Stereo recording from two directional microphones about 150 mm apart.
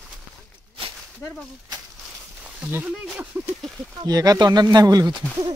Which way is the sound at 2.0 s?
10° right (ahead or behind).